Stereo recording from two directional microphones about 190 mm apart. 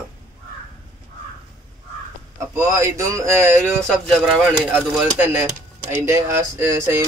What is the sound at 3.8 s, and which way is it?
Speech, centre (ahead or behind).